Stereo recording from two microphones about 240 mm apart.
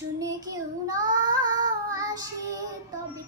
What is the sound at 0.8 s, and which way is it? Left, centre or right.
Child singing, centre.